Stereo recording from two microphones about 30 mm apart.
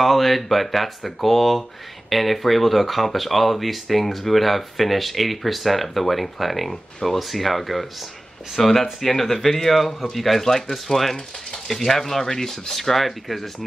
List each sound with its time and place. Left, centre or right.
0.0 s speech: centre
12.3 s speech: centre
12.7 s speech: centre